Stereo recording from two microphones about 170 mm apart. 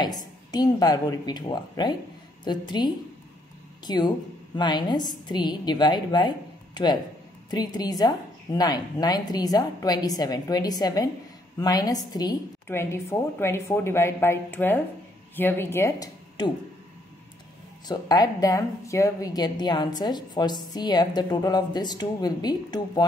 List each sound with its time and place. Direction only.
0.0 s a woman's voice: 25° left (ahead or behind)
17.8 s a woman's voice: 25° left (ahead or behind)